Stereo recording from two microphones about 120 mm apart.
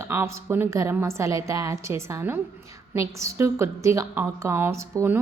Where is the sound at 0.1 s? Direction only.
20° right (ahead or behind).